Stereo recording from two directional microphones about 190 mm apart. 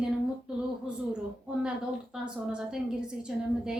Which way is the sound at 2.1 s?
5° right (ahead or behind).